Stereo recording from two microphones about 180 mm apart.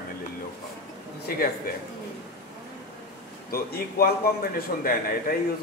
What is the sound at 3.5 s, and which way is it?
A man's voice, 55° left (ahead or behind).